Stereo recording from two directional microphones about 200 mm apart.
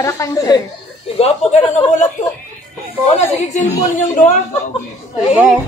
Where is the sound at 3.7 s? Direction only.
15° left (ahead or behind).